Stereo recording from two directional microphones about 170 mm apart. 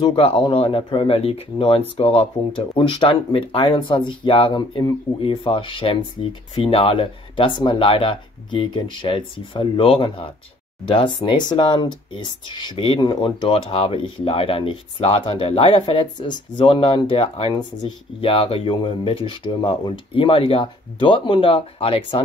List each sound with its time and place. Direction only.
0.0 s speech: 30° left (ahead or behind)